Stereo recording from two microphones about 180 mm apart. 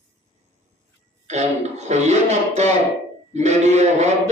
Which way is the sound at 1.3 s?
40° right (ahead or behind).